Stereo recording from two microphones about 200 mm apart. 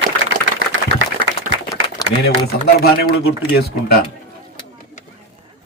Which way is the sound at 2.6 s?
50° left (ahead or behind).